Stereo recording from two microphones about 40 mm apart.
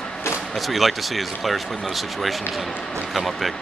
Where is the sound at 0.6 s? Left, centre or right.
Centre.